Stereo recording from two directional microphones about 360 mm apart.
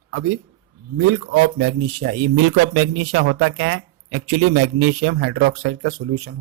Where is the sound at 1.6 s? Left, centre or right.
Right.